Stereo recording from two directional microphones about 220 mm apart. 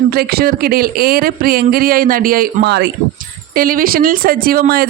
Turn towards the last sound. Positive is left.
turn(degrees=-45)  # may be behind; listen again after turning